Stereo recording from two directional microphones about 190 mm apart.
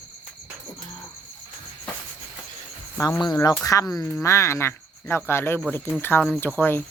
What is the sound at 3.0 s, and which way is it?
Speech, 20° left (ahead or behind).